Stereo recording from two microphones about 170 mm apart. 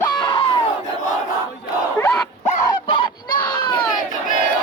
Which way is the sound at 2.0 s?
15° left (ahead or behind).